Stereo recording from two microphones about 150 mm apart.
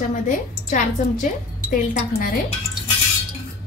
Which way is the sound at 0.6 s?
55° left (ahead or behind).